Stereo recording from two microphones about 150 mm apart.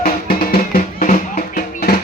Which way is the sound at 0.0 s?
80° left.